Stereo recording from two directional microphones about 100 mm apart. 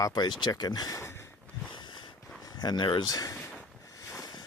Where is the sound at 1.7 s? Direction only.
50° left (ahead or behind).